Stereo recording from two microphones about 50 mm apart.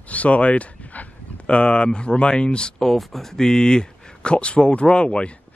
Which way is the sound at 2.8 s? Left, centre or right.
Centre.